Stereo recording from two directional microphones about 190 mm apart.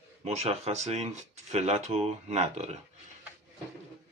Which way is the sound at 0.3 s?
35° right (ahead or behind).